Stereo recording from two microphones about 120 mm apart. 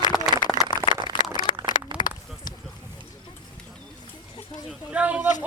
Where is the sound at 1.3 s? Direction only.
40° left (ahead or behind).